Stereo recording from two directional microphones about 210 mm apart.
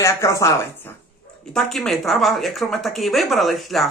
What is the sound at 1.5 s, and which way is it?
A woman's voice, centre (ahead or behind).